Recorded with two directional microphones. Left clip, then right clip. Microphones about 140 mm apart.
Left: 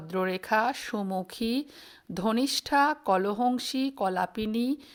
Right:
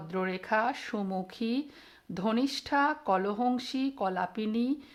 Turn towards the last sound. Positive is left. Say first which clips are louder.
# left 2 dB
turn(degrees=35)  # may be behind; listen again after turning